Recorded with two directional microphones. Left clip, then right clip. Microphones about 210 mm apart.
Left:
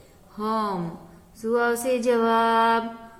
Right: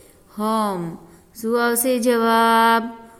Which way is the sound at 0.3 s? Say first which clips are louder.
Right 4 dB; 40° right (ahead or behind).